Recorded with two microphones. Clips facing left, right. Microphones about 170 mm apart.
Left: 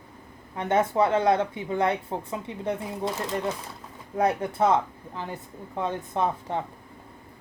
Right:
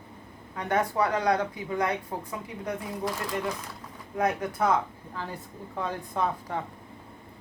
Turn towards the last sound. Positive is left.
turn(degrees=25)  # may be behind; listen again after turning